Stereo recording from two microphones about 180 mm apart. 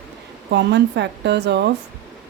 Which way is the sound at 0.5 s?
70° right (ahead or behind).